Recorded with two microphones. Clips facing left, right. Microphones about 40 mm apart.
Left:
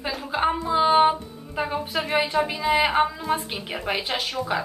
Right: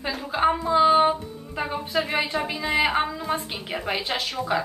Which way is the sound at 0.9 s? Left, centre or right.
Centre.